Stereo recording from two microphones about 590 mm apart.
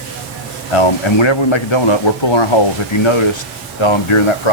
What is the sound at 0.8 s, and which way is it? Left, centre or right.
Speech, left.